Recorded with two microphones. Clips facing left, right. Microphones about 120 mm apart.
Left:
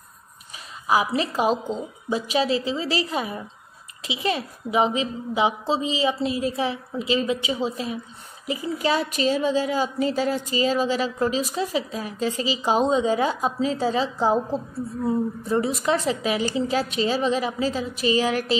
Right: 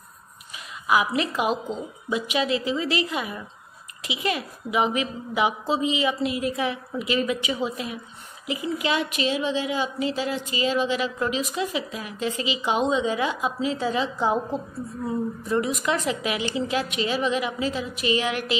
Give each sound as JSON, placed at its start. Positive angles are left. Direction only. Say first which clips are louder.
{"t": 0.8, "sound": "a woman's voice", "louder": "left 1 dB", "side_deg": 35}